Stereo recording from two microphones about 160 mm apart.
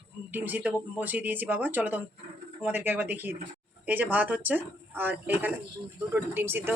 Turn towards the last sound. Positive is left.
turn(degrees=-15)  # may be behind; listen again after turning